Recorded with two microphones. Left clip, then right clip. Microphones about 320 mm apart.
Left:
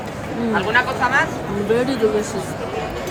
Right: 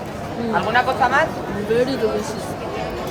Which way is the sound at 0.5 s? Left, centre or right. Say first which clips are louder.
Right 1 dB; right.